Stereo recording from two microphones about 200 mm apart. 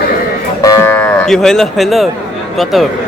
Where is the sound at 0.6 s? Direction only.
15° left (ahead or behind).